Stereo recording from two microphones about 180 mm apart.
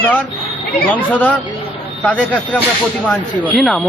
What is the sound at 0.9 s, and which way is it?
Speech, 10° left (ahead or behind).